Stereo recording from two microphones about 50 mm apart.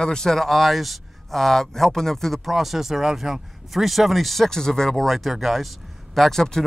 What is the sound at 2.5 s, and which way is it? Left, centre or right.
Speech, centre.